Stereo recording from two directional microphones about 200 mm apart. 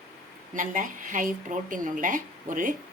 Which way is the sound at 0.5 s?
40° right (ahead or behind).